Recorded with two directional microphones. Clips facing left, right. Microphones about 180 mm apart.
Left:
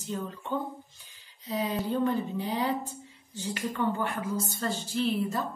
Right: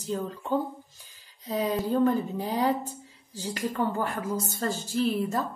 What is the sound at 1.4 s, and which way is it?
Speech, 45° right (ahead or behind).